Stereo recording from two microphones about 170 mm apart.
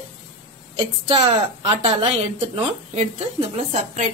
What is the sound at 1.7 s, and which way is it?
A woman's voice, 35° right (ahead or behind).